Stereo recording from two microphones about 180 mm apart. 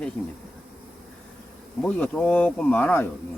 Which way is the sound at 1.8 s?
5° left (ahead or behind).